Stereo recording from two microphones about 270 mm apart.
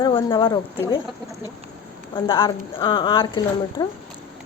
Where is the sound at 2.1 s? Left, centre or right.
Centre.